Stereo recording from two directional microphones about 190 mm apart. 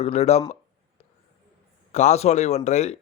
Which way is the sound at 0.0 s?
35° left (ahead or behind).